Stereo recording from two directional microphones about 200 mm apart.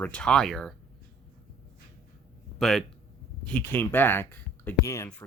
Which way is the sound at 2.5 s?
Centre (ahead or behind).